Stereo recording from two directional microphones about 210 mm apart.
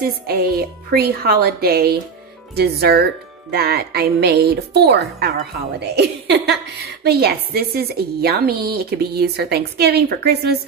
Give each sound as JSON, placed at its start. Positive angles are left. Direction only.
{"t": 0.0, "sound": "speech", "side_deg": -45}